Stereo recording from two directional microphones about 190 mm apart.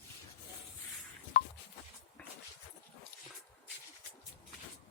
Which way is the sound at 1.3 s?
50° left (ahead or behind).